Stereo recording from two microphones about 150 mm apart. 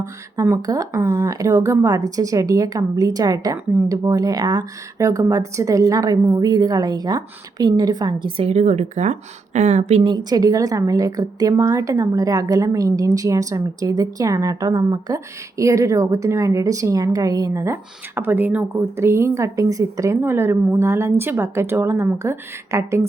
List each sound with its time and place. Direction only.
0.0 s a woman's voice: 20° right (ahead or behind)
8.4 s speech: 50° right (ahead or behind)
10.0 s a woman's voice: 30° right (ahead or behind)